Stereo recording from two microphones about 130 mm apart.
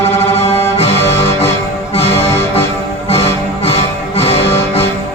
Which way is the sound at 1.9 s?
50° left (ahead or behind).